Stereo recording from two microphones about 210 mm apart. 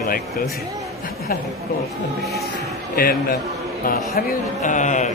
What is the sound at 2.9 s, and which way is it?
Speech, 45° left (ahead or behind).